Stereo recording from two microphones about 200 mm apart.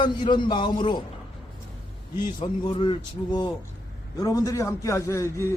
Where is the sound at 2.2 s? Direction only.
25° left (ahead or behind).